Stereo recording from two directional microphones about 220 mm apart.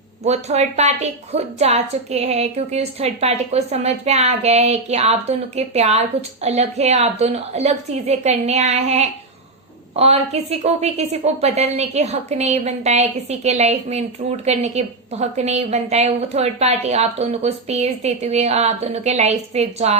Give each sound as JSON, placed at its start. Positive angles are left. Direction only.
{"t": 0.3, "sound": "a woman's voice", "side_deg": -30}